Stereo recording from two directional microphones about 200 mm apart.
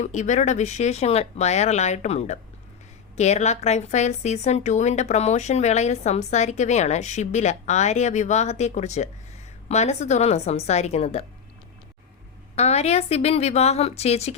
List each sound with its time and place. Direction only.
0.0 s a woman's voice: 35° left (ahead or behind)
12.5 s a woman's voice: 30° left (ahead or behind)